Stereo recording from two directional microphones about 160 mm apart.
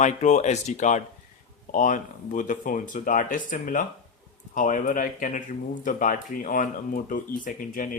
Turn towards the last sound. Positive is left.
turn(degrees=60)  # may be behind; listen again after turning